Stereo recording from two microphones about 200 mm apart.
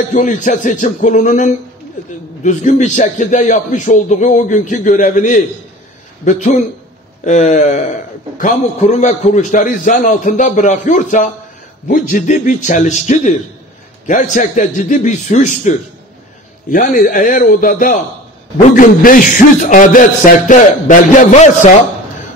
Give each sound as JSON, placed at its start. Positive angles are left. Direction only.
{"t": 0.1, "sound": "a man's voice", "side_deg": 40}